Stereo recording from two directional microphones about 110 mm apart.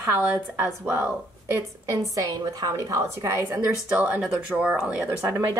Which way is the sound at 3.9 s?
10° right (ahead or behind).